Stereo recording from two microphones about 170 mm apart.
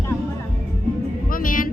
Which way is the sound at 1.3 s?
55° left (ahead or behind).